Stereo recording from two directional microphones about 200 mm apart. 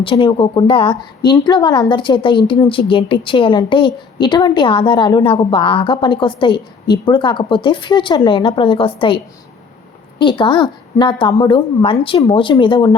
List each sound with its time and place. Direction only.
0.0 s a woman's voice: 25° left (ahead or behind)